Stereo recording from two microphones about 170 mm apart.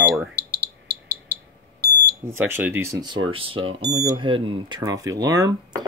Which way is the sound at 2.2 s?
15° right (ahead or behind).